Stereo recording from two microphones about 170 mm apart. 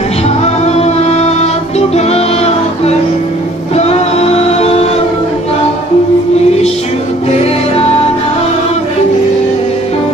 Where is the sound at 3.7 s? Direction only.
40° left (ahead or behind).